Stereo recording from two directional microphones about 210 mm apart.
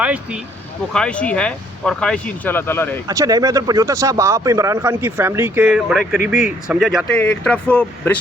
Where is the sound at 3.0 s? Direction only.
15° right (ahead or behind).